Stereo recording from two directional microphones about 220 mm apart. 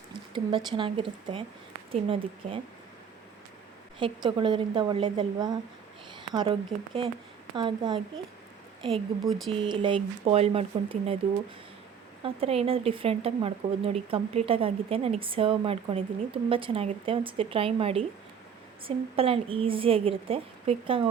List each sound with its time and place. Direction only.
0.1 s speech: 20° right (ahead or behind)
4.0 s speech: 20° right (ahead or behind)
9.2 s speech: centre (ahead or behind)
9.5 s speech: 20° right (ahead or behind)
12.2 s speech: 25° right (ahead or behind)